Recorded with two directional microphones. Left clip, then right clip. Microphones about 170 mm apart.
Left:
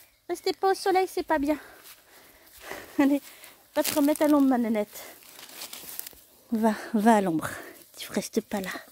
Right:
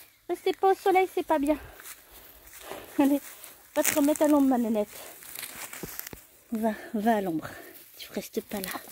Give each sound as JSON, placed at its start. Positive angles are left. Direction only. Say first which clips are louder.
{"t": 0.3, "sound": "speech", "louder": "right 1 dB", "side_deg": -10}
{"t": 2.6, "sound": "dog", "louder": "left 1 dB", "side_deg": 0}
{"t": 3.7, "sound": "speech", "louder": "even", "side_deg": 10}
{"t": 6.6, "sound": "speech", "louder": "left 4 dB", "side_deg": 30}
{"t": 8.5, "sound": "speech", "louder": "left 2 dB", "side_deg": 15}